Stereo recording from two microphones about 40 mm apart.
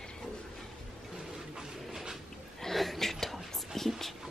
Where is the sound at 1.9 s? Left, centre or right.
Centre.